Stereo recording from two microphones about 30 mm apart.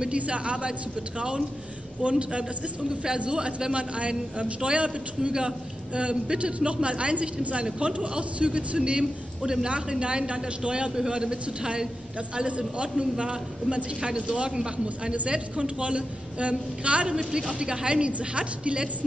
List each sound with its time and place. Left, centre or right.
0.1 s a woman's voice: right
2.0 s a woman's voice: right
9.4 s a woman's voice: right
9.7 s a woman's voice: right
12.4 s a woman's voice: right
14.5 s a woman's voice: right
15.2 s a woman's voice: right